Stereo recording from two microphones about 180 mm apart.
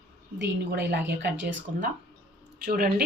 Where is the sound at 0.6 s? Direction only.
65° right (ahead or behind).